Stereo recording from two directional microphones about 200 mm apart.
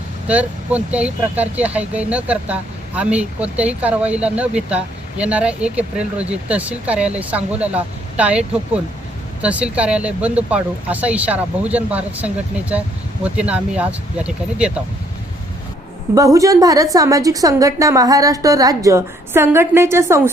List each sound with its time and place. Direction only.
0.3 s speech: 5° right (ahead or behind)
16.1 s speech: 15° right (ahead or behind)